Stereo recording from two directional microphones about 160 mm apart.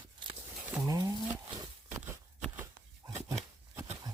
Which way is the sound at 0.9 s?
20° right (ahead or behind).